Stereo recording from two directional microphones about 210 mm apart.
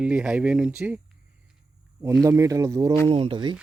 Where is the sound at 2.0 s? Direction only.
15° right (ahead or behind).